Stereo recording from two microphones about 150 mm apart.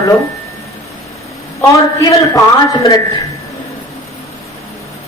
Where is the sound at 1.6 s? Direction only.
20° left (ahead or behind).